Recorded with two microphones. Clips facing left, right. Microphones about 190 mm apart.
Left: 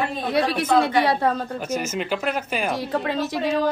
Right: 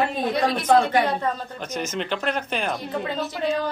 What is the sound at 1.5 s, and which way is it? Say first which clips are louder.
Speech: left 3 dB; 10° left (ahead or behind).